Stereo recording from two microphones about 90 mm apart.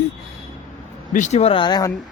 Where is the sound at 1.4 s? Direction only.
70° left (ahead or behind).